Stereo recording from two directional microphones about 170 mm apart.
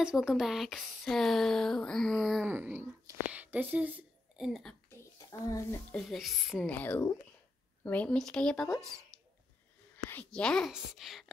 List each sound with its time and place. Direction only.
0.0 s speech: 5° right (ahead or behind)
2.5 s speech: 15° right (ahead or behind)
4.8 s a sound: 15° left (ahead or behind)
5.9 s speech: centre (ahead or behind)
10.0 s speech: 10° left (ahead or behind)